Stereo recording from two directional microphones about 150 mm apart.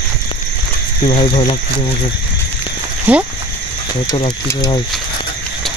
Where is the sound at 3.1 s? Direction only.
10° right (ahead or behind).